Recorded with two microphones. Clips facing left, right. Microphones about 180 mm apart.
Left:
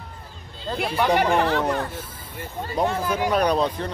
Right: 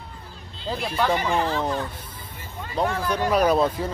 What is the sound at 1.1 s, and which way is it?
Speech, 65° left (ahead or behind).